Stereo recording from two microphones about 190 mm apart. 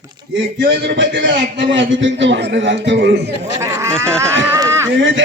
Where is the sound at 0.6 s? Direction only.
65° right (ahead or behind).